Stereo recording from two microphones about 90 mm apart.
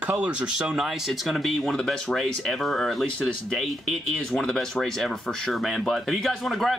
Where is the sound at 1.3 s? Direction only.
Centre (ahead or behind).